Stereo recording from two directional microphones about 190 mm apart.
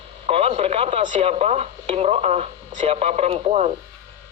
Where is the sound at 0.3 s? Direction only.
30° right (ahead or behind).